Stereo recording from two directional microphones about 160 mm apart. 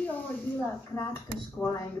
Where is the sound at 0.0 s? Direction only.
10° left (ahead or behind).